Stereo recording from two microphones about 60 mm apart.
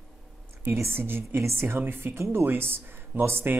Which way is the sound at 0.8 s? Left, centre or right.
Right.